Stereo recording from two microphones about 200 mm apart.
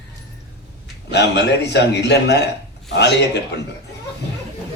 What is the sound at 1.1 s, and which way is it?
A man's voice, 60° left (ahead or behind).